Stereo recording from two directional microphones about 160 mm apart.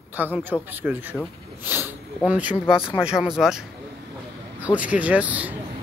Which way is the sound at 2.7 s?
35° left (ahead or behind).